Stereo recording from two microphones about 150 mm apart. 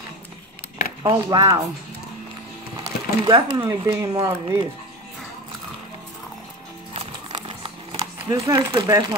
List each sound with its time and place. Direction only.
1.0 s speech: 25° right (ahead or behind)
2.8 s speech: 30° right (ahead or behind)
7.0 s a sound: 35° right (ahead or behind)
8.5 s speech: 25° right (ahead or behind)